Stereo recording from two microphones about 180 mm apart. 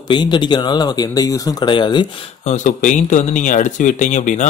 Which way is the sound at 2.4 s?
45° left (ahead or behind).